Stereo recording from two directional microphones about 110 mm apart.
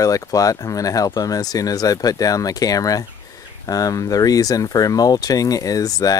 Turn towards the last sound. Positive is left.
turn(degrees=35)  # may be behind; listen again after turning